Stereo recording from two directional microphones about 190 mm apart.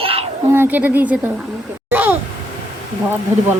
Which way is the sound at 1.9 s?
10° right (ahead or behind).